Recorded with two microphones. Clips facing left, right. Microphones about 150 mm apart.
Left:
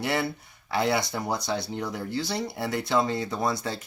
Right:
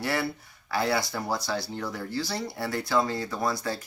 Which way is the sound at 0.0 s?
20° left (ahead or behind).